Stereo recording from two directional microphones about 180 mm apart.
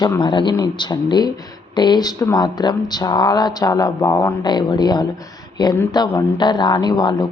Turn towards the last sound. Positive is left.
turn(degrees=20)  # may be behind; listen again after turning